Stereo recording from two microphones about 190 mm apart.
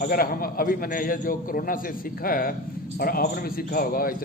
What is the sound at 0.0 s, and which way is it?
A man's voice, 50° left (ahead or behind).